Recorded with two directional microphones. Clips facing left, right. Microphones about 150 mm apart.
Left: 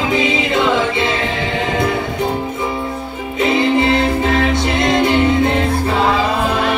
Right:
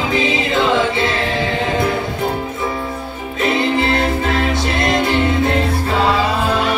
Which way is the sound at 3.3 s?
20° left (ahead or behind).